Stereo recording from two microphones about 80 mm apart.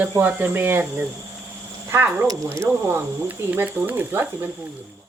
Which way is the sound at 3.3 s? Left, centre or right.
Right.